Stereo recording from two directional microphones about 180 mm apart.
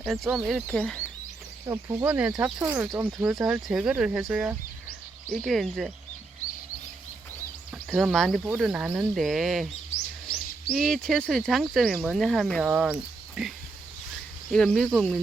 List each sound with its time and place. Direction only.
0.0 s speech: 5° right (ahead or behind)
1.6 s speech: 15° right (ahead or behind); by 5.9 s centre (ahead or behind)
7.7 s speech: 5° right (ahead or behind)
10.8 s speech: 5° left (ahead or behind)
14.5 s speech: centre (ahead or behind)